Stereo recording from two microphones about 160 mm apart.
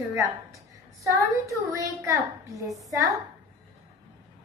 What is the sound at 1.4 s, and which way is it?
A woman's voice, 20° right (ahead or behind).